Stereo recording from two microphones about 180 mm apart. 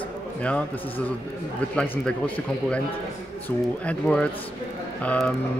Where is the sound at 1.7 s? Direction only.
5° left (ahead or behind).